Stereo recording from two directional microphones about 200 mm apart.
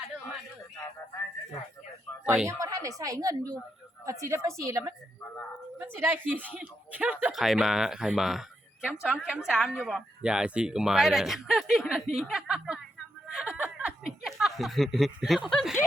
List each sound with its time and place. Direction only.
2.2 s speech: 5° right (ahead or behind)
2.5 s a sound: 15° right (ahead or behind)
3.0 s a woman's voice: 15° right (ahead or behind); by 15.8 s centre (ahead or behind)